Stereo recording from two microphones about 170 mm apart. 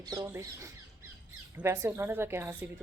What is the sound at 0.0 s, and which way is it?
Speech, 20° right (ahead or behind).